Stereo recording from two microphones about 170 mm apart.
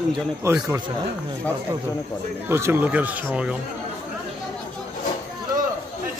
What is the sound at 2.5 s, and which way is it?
A man's voice, 15° right (ahead or behind).